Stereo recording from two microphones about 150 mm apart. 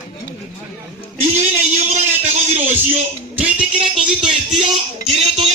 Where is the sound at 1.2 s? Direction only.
50° right (ahead or behind).